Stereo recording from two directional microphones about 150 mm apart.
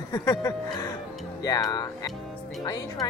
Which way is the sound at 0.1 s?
25° left (ahead or behind).